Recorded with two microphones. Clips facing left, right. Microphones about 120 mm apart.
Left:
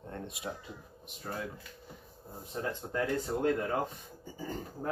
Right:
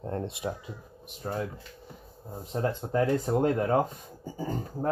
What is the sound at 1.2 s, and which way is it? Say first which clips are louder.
Speech: right 6 dB; 25° right (ahead or behind).